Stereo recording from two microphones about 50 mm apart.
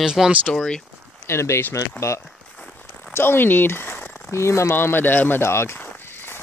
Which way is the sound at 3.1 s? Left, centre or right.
Left.